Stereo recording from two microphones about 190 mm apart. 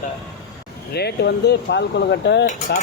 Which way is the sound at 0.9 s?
60° left (ahead or behind).